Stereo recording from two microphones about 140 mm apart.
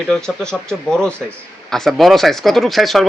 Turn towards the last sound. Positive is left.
turn(degrees=0)  # may be behind; listen again after turning